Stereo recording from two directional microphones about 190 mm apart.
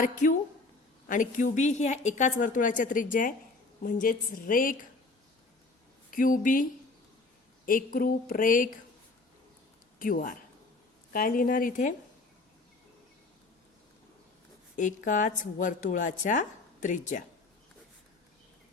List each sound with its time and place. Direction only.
0.0 s a woman's voice: 45° left (ahead or behind)
6.1 s a woman's voice: 45° left (ahead or behind)
10.0 s a woman's voice: 45° left (ahead or behind)
14.8 s speech: 40° left (ahead or behind)